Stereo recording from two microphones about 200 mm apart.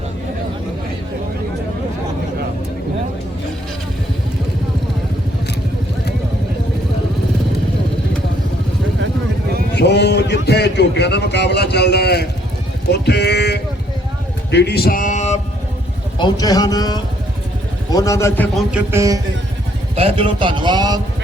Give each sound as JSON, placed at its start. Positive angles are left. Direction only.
{"t": 9.7, "sound": "a sound", "side_deg": 55}
{"t": 12.9, "sound": "speech", "side_deg": 55}
{"t": 14.5, "sound": "a sound", "side_deg": 55}
{"t": 16.1, "sound": "a man's voice", "side_deg": 20}
{"t": 18.5, "sound": "speech", "side_deg": -10}
{"t": 20.0, "sound": "speech", "side_deg": -30}